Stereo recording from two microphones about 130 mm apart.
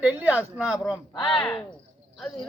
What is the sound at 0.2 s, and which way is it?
Speech, 10° right (ahead or behind).